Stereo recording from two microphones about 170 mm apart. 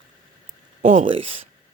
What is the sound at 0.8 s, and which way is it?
Speech, 50° right (ahead or behind).